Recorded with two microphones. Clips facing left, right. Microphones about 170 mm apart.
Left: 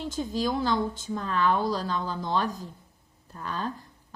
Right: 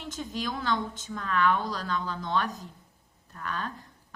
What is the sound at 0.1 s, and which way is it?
A woman's voice, 30° left (ahead or behind).